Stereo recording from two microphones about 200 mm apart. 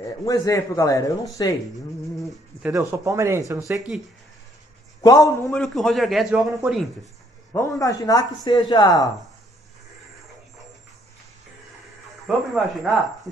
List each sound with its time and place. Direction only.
0.3 s speech: 15° left (ahead or behind)
2.1 s bird: centre (ahead or behind)
2.7 s speech: 15° right (ahead or behind)
3.9 s a man's voice: 5° right (ahead or behind)
5.0 s speech: 15° left (ahead or behind)
5.5 s a man's voice: centre (ahead or behind)
7.5 s speech: 15° left (ahead or behind)
12.3 s a man's voice: centre (ahead or behind)